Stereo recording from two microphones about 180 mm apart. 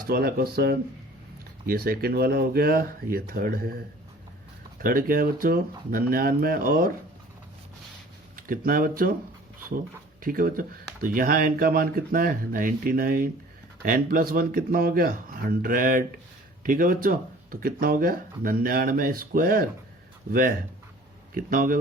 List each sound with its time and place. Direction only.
0.0 s speech: 55° right (ahead or behind)
4.8 s speech: 50° right (ahead or behind)
8.4 s speech: 50° right (ahead or behind)
10.2 s speech: 50° right (ahead or behind)